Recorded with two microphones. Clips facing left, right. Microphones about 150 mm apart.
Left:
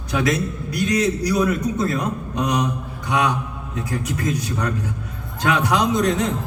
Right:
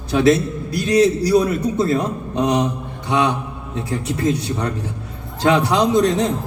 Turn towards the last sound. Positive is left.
turn(degrees=-30)  # may be behind; listen again after turning